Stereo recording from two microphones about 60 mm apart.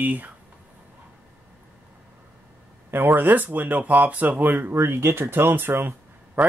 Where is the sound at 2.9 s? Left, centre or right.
Right.